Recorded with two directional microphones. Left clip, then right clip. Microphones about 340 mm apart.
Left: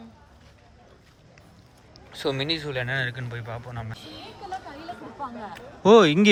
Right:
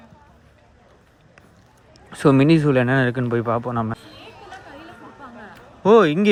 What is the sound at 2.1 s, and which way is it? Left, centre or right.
Speech, centre.